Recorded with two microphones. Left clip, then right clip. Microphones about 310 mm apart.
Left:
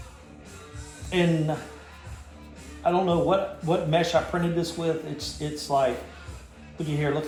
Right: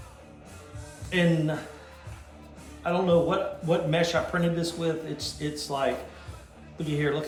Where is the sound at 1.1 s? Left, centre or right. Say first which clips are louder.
Left 1 dB; centre.